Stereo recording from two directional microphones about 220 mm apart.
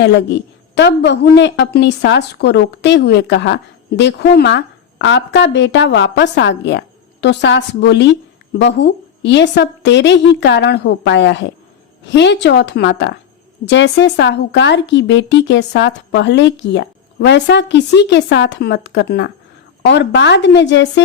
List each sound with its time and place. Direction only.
0.0 s a woman's voice: 50° left (ahead or behind)